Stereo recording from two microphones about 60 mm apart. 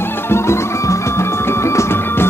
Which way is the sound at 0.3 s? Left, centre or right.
Left.